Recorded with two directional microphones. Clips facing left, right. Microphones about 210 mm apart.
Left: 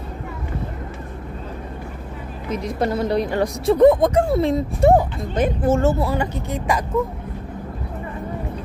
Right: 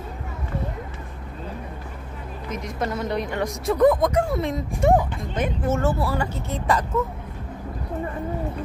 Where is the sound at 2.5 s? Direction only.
30° left (ahead or behind); by 6.8 s 15° left (ahead or behind).